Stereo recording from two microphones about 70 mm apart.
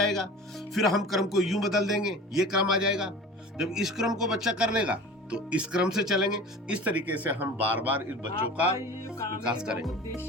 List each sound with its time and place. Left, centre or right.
0.7 s a man's voice: centre
6.8 s speech: right
9.0 s music: left
9.4 s speech: centre